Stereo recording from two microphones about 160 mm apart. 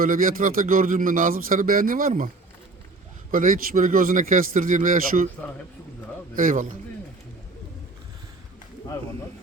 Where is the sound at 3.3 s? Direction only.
60° right (ahead or behind).